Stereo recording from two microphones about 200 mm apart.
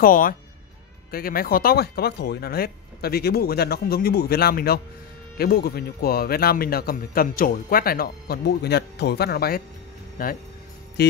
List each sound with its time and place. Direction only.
0.0 s a man's voice: 45° left (ahead or behind)
11.0 s music: 55° left (ahead or behind)